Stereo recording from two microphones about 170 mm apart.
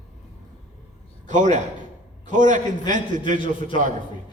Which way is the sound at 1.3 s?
45° right (ahead or behind).